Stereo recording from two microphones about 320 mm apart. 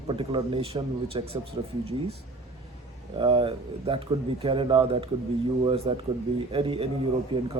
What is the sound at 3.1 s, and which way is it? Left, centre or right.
Speech, centre.